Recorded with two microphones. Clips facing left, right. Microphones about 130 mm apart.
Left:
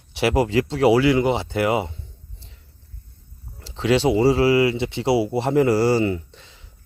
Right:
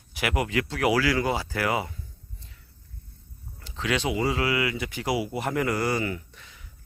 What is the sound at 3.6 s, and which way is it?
Speech, 30° left (ahead or behind).